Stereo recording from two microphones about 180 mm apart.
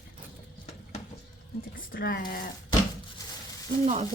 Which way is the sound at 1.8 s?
50° left (ahead or behind).